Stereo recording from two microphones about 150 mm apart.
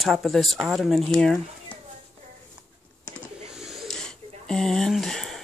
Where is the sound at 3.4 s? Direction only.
5° right (ahead or behind).